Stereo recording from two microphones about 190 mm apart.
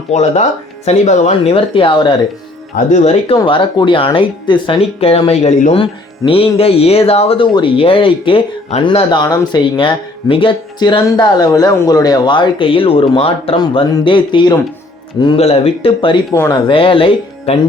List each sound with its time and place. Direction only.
0.1 s speech: 35° left (ahead or behind)
16.3 s speech: 15° left (ahead or behind)